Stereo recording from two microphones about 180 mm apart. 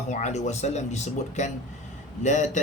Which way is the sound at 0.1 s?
40° left (ahead or behind).